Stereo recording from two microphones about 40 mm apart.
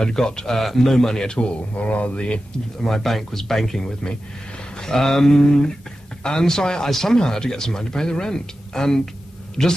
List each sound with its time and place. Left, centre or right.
0.0 s speech: centre
1.8 s speech: left
2.8 s speech: centre